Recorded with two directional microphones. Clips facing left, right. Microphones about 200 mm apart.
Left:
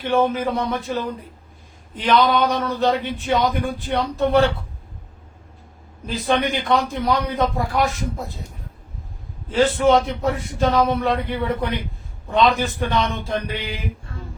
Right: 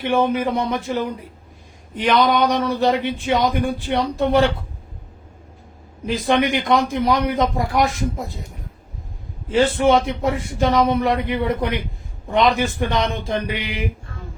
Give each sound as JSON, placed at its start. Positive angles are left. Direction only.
{"t": 0.0, "sound": "speech", "side_deg": -10}
{"t": 2.0, "sound": "speech", "side_deg": -15}
{"t": 6.1, "sound": "speech", "side_deg": -15}
{"t": 9.5, "sound": "speech", "side_deg": -15}